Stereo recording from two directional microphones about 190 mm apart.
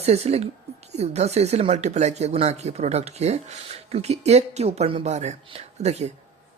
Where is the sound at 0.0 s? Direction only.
35° right (ahead or behind).